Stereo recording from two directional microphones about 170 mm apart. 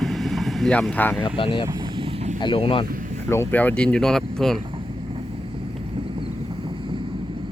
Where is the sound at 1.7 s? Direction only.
25° right (ahead or behind).